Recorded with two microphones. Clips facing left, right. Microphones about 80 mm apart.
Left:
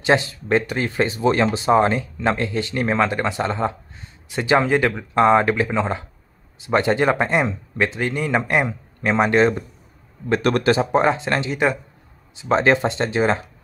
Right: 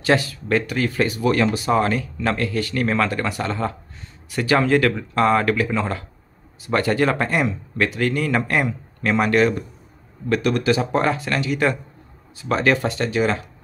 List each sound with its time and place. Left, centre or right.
0.0 s speech: left
10.4 s speech: left
10.8 s speech: left